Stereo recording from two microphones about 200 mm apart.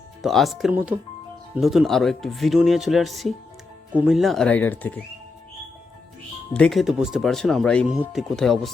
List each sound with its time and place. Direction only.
0.2 s speech: centre (ahead or behind)
6.5 s speech: 5° left (ahead or behind)